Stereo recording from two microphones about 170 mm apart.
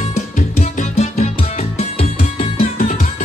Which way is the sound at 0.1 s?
40° left (ahead or behind).